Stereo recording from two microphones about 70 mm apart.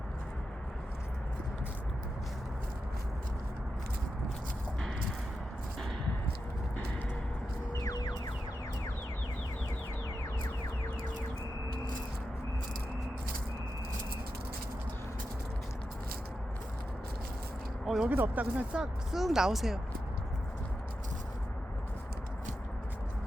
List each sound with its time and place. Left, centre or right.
7.7 s music: left
17.8 s speech: centre
18.1 s speech: right
19.1 s speech: centre